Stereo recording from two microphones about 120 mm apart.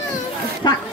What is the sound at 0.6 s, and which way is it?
Speech, 35° left (ahead or behind).